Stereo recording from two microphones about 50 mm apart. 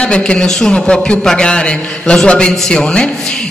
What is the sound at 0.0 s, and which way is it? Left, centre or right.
A man's voice, left.